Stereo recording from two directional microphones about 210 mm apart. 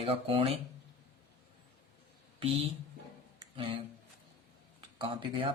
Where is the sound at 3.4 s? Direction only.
25° right (ahead or behind).